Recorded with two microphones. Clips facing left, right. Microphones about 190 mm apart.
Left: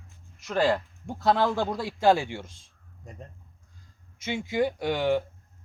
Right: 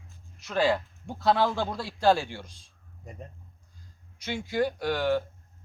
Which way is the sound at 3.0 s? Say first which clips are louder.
Right 1 dB; 5° right (ahead or behind).